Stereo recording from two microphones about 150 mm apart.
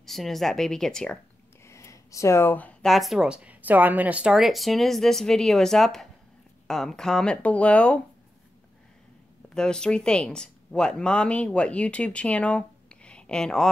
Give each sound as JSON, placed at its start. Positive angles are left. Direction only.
{"t": 0.0, "sound": "speech", "side_deg": 0}
{"t": 1.6, "sound": "speech", "side_deg": 20}
{"t": 9.5, "sound": "speech", "side_deg": 5}